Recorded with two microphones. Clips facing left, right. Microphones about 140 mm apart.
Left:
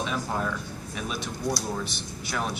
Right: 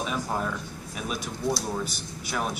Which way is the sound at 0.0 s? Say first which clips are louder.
Even; 5° right (ahead or behind).